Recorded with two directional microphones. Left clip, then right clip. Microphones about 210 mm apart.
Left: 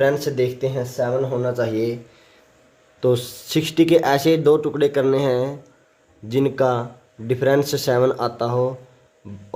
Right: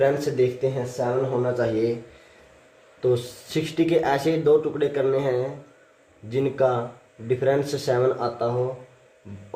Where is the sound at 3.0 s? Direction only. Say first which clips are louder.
Left 3 dB; 50° left (ahead or behind).